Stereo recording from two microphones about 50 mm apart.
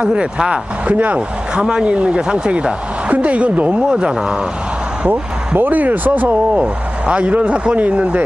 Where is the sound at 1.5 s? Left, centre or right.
Centre.